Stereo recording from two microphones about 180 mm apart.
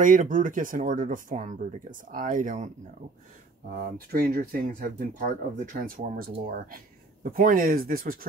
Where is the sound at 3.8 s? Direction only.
55° right (ahead or behind).